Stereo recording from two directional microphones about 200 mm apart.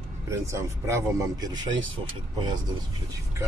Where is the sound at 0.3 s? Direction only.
15° right (ahead or behind).